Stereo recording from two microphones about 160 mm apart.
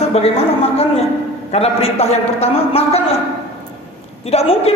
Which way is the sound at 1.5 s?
40° left (ahead or behind).